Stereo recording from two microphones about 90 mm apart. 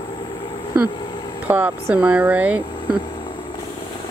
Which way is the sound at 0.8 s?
55° left (ahead or behind).